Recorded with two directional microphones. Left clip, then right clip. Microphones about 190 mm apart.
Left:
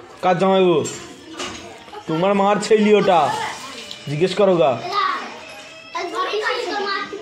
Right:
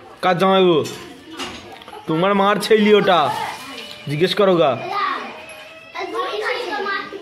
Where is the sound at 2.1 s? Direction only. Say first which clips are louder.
Right 1 dB; 30° right (ahead or behind).